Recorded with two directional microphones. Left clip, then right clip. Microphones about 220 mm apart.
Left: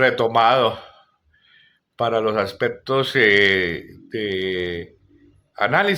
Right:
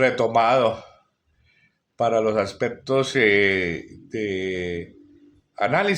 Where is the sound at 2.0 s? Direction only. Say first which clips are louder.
Even; centre (ahead or behind).